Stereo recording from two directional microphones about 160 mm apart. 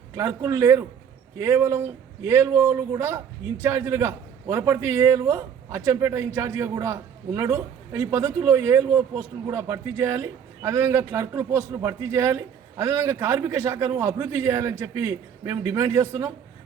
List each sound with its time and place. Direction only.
0.2 s a man's voice: 20° right (ahead or behind)